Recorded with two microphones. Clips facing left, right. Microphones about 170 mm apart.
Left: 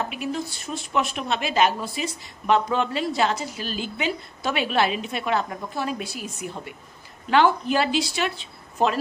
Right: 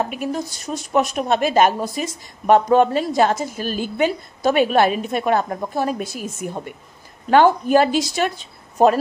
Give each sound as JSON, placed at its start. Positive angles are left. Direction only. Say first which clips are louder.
{"t": 0.0, "sound": "a woman's voice", "louder": "right 4 dB", "side_deg": -45}